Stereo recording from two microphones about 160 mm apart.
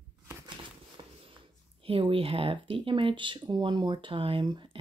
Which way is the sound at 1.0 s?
30° right (ahead or behind).